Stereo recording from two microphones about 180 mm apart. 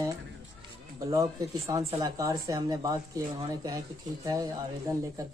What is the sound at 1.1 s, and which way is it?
Speech, 15° right (ahead or behind).